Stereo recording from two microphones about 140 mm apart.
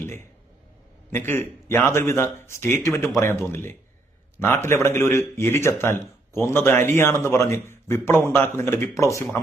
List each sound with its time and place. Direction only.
0.0 s speech: 15° left (ahead or behind)